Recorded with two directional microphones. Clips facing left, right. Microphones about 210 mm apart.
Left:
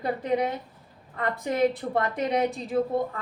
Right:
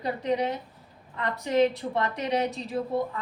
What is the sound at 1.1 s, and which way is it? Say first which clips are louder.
Speech: left 2 dB; 50° left (ahead or behind).